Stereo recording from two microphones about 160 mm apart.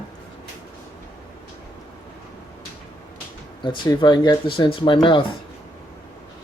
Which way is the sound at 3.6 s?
30° left (ahead or behind).